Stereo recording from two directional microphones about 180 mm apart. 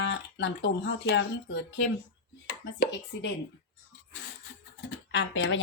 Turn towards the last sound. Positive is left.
turn(degrees=90)